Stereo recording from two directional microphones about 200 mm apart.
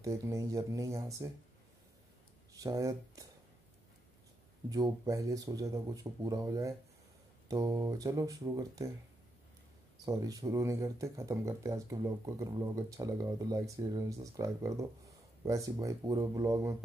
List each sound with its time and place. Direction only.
0.0 s speech: 15° right (ahead or behind)
2.5 s speech: 15° right (ahead or behind)
4.6 s speech: 20° right (ahead or behind)
10.0 s speech: 15° right (ahead or behind)